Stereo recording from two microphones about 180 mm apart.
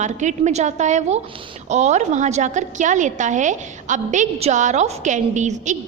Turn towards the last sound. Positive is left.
turn(degrees=-40)  # may be behind; listen again after turning